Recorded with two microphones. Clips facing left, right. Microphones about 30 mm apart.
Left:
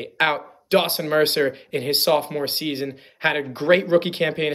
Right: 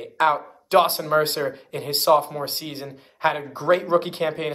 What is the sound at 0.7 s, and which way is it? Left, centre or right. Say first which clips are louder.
Speech: right 1 dB; left.